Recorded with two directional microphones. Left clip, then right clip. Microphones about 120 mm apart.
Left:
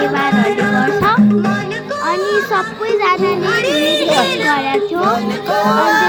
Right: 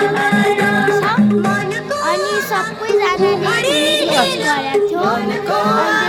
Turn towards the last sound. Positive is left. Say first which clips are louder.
# left 2 dB
turn(degrees=35)  # may be behind; listen again after turning